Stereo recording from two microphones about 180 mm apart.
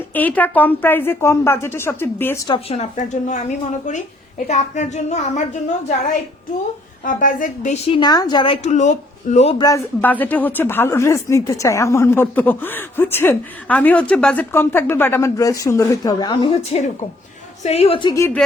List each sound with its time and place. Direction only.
0.1 s speech: 10° left (ahead or behind)
2.5 s a woman's voice: 35° left (ahead or behind)
4.4 s a woman's voice: 40° left (ahead or behind)
7.9 s a woman's voice: 25° left (ahead or behind)
8.6 s a woman's voice: 40° left (ahead or behind)
9.6 s speech: 20° left (ahead or behind)
17.6 s a woman's voice: 35° left (ahead or behind)